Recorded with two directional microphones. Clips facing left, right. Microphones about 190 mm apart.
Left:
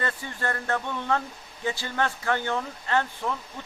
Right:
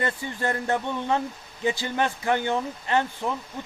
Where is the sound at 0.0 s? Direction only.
20° right (ahead or behind).